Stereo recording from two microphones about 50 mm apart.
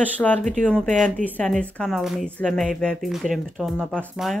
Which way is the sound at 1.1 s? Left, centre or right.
Left.